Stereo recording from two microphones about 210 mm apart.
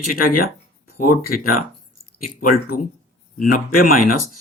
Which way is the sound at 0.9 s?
45° left (ahead or behind).